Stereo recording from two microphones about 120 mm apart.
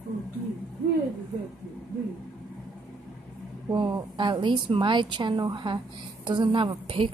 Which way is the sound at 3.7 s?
40° right (ahead or behind).